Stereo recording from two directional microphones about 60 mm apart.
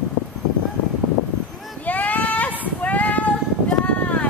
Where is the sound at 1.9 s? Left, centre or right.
Left.